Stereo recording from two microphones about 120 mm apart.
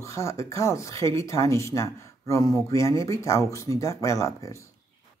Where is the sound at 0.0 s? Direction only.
25° left (ahead or behind).